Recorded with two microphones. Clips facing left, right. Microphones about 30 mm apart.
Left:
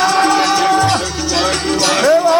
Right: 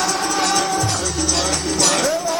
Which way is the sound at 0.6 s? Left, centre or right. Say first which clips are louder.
Left 8 dB; left.